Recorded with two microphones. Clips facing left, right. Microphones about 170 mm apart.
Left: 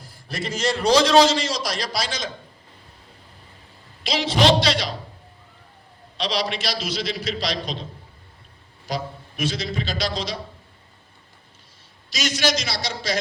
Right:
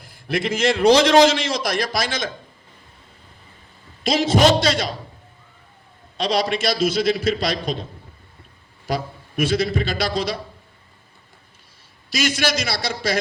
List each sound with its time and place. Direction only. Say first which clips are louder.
0.0 s a man's voice: right 7 dB; 55° right (ahead or behind)
4.0 s a man's voice: right 3 dB; 50° right (ahead or behind)
6.1 s a man's voice: right 5 dB; 50° right (ahead or behind)
8.9 s a man's voice: right 3 dB; 55° right (ahead or behind)
12.1 s a man's voice: right 2 dB; 55° right (ahead or behind)